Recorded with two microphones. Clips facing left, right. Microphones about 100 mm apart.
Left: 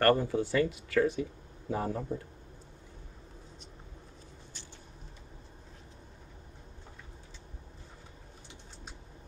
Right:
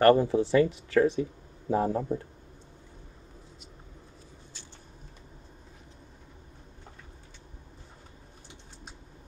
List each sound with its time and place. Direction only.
0.0 s speech: 15° right (ahead or behind)